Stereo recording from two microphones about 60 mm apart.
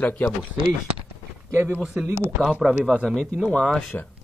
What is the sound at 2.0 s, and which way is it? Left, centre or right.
Speech, right.